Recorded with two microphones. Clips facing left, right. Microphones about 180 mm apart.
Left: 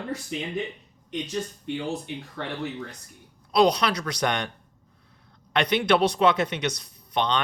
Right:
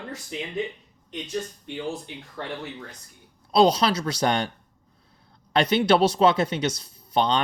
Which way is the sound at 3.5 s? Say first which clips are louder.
Right 2 dB; 30° right (ahead or behind).